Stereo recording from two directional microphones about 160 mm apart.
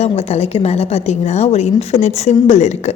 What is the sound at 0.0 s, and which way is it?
A woman's voice, 40° left (ahead or behind).